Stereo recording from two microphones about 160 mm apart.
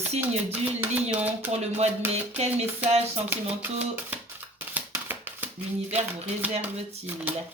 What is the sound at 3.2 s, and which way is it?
Speech, 10° right (ahead or behind).